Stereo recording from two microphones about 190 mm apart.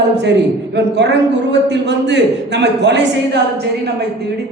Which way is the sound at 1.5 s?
65° right (ahead or behind).